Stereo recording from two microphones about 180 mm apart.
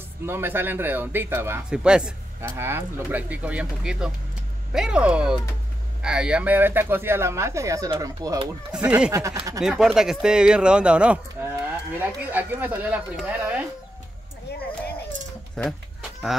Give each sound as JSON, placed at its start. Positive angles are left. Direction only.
{"t": 0.3, "sound": "speech", "side_deg": -10}
{"t": 8.7, "sound": "speech", "side_deg": -5}
{"t": 9.1, "sound": "speech", "side_deg": -15}
{"t": 9.6, "sound": "speech", "side_deg": -5}
{"t": 15.5, "sound": "livestock", "side_deg": 0}